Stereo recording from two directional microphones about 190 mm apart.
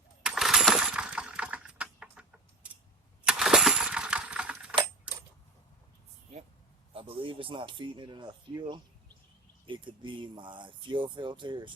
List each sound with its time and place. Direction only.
0.2 s coin: 5° right (ahead or behind)
2.6 s a sound: 5° right (ahead or behind)
3.2 s coin: 5° right (ahead or behind)
6.9 s speech: 25° right (ahead or behind)